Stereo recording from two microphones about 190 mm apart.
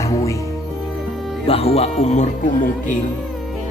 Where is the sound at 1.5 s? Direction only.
30° left (ahead or behind).